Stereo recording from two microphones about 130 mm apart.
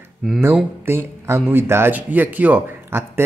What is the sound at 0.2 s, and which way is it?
Speech, 5° left (ahead or behind).